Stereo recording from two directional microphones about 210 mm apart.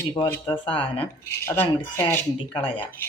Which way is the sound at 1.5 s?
10° left (ahead or behind).